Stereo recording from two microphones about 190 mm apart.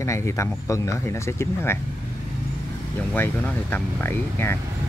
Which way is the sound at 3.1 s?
10° left (ahead or behind).